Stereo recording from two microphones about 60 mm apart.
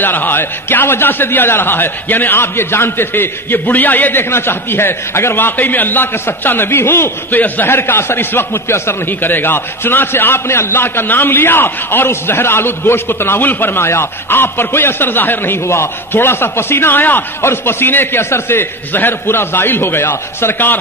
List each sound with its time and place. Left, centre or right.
0.0 s a man's voice: left